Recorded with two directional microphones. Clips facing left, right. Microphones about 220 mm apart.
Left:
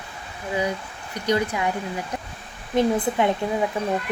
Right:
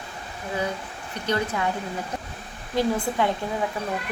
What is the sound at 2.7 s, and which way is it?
Speech, 20° left (ahead or behind).